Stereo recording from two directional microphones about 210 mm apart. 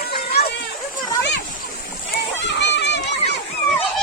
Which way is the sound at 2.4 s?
55° left (ahead or behind).